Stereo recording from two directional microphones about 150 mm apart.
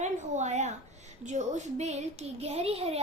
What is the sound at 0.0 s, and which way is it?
A child's voice, 50° right (ahead or behind).